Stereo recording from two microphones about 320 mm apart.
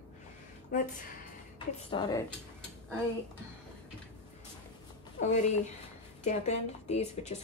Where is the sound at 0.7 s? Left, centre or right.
Left.